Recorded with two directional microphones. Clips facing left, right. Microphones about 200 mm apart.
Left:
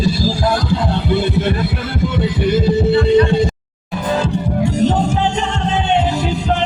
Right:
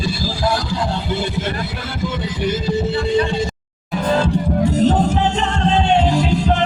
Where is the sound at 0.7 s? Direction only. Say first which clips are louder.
Left 4 dB; 55° left (ahead or behind).